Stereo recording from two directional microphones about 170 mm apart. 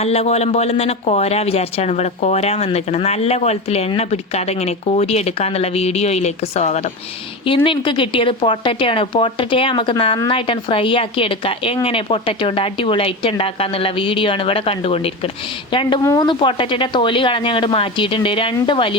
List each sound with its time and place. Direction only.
0.0 s speech: 35° left (ahead or behind)
7.4 s speech: 30° left (ahead or behind)